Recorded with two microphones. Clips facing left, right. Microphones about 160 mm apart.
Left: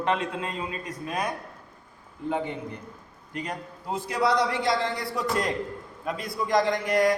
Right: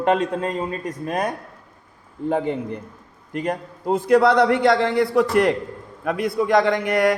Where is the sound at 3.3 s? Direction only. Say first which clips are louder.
Right 9 dB; 50° right (ahead or behind).